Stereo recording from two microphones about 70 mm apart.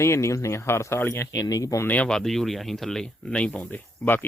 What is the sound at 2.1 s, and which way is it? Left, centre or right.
Speech, centre.